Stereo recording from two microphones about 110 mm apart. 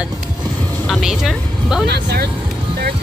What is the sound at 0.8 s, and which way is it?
Vehicle, 5° right (ahead or behind).